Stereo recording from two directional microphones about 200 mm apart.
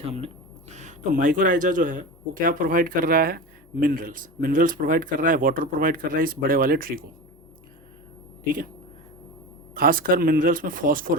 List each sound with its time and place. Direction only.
0.0 s speech: 30° right (ahead or behind); by 7.0 s 45° right (ahead or behind)
9.7 s speech: 45° right (ahead or behind)